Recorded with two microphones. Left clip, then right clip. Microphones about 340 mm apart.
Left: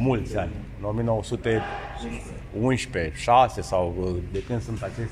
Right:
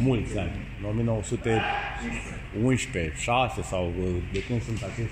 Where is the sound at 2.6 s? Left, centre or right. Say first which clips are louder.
Left 2 dB; left.